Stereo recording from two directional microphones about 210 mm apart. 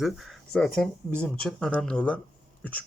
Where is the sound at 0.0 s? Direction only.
Centre (ahead or behind).